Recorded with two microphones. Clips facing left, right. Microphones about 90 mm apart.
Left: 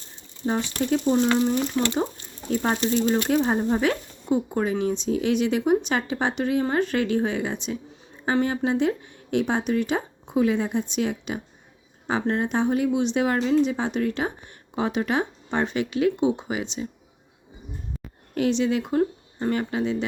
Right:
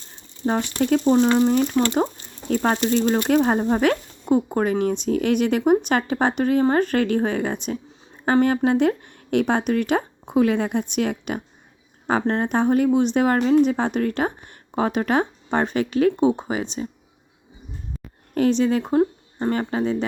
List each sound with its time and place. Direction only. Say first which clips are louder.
0.4 s speech: right 4 dB; 60° right (ahead or behind)
12.2 s speech: right 1 dB; 45° right (ahead or behind)
18.3 s speech: right 4 dB; 40° right (ahead or behind)